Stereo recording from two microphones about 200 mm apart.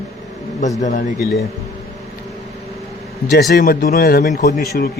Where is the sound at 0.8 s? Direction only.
40° left (ahead or behind).